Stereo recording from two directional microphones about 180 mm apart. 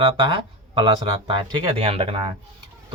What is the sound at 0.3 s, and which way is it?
Speech, 30° right (ahead or behind).